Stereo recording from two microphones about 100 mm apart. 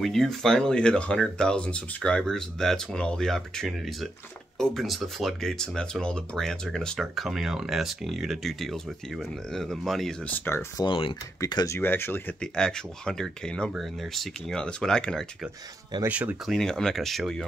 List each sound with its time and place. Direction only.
0.0 s speech: centre (ahead or behind)
10.2 s speech: 20° left (ahead or behind)
10.9 s speech: 60° left (ahead or behind)
11.6 s speech: 25° left (ahead or behind)
12.4 s speech: 5° left (ahead or behind)
16.1 s speech: 15° right (ahead or behind)
16.4 s speech: 5° left (ahead or behind)